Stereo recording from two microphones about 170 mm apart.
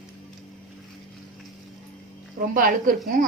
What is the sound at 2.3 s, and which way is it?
Speech, 50° right (ahead or behind).